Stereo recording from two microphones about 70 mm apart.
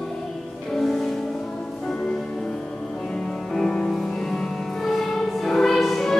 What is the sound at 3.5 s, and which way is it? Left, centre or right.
Music, centre.